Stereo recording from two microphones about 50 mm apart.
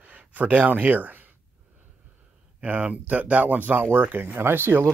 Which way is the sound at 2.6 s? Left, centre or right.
Right.